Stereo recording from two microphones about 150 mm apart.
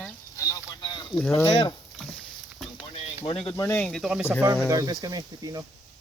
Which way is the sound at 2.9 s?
35° left (ahead or behind).